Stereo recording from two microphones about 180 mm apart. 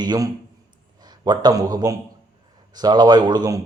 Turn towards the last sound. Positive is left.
turn(degrees=-20)  # may be behind; listen again after turning